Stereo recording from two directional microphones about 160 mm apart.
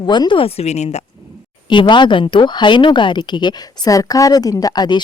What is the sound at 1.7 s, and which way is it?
Speech, 30° left (ahead or behind).